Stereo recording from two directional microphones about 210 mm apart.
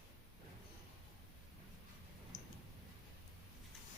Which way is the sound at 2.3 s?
35° left (ahead or behind).